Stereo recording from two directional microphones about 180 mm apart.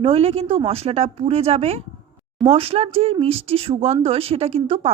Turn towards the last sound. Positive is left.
turn(degrees=-35)  # may be behind; listen again after turning